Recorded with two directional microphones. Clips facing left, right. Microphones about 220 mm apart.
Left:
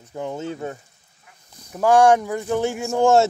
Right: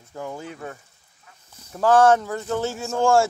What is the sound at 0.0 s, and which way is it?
Speech, 20° left (ahead or behind).